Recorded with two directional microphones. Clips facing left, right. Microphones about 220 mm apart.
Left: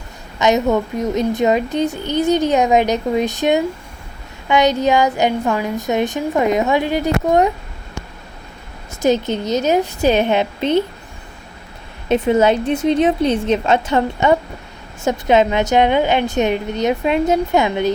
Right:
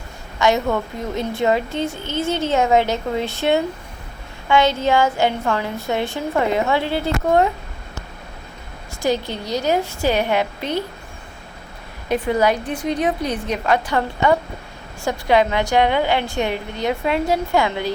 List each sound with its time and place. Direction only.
0.3 s a woman's voice: 20° left (ahead or behind)
9.0 s a woman's voice: 20° left (ahead or behind)
12.0 s a woman's voice: 25° left (ahead or behind)